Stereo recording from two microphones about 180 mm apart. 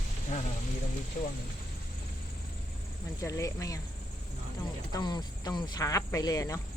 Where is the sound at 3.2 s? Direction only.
20° left (ahead or behind).